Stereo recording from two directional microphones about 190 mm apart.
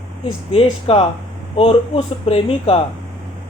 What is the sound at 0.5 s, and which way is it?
Speech, 30° left (ahead or behind).